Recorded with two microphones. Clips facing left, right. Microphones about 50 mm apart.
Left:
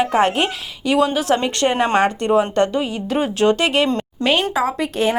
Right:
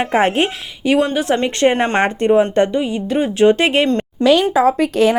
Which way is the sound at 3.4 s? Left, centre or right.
Centre.